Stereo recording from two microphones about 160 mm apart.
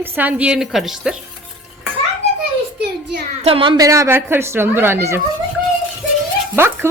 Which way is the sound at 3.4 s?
35° right (ahead or behind).